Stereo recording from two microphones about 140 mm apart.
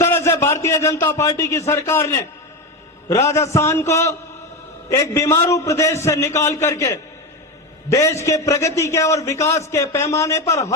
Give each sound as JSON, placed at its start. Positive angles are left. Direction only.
{"t": 0.0, "sound": "a man's voice", "side_deg": 20}